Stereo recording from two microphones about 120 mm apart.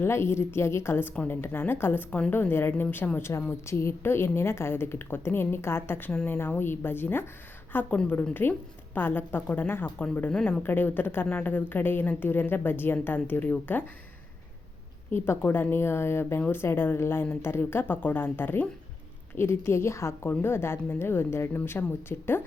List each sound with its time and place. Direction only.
0.0 s a woman's voice: 20° left (ahead or behind)
15.1 s a woman's voice: 20° left (ahead or behind)